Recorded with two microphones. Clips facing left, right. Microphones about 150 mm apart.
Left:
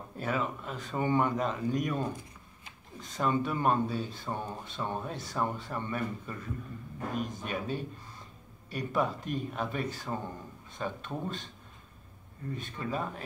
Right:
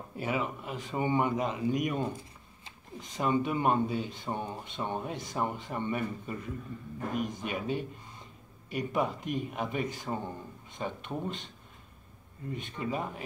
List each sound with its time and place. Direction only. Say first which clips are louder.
0.2 s speech: even; 10° right (ahead or behind)
12.5 s speech: right 1 dB; 20° right (ahead or behind)